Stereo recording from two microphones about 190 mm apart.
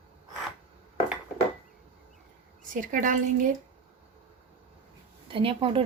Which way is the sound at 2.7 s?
45° right (ahead or behind).